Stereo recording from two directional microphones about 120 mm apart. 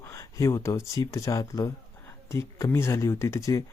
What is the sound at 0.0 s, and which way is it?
Speech, 25° left (ahead or behind).